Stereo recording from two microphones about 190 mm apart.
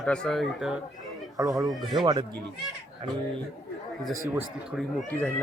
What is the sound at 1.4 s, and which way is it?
Speech, 20° right (ahead or behind).